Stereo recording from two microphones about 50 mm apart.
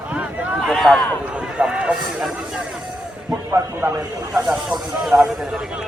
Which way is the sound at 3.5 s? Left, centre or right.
Right.